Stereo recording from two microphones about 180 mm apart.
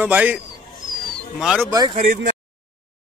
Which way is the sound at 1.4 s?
5° right (ahead or behind).